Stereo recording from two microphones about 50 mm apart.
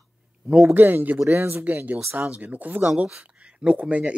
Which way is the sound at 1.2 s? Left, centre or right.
Right.